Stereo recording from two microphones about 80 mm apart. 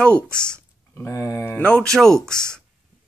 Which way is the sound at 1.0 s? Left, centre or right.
Left.